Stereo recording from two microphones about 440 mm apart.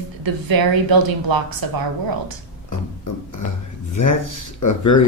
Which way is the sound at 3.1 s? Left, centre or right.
Left.